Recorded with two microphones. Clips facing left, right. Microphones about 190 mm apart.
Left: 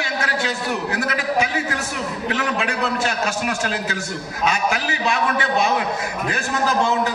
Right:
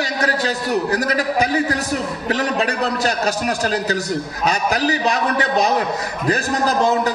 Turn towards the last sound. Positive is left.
turn(degrees=-40)  # may be behind; listen again after turning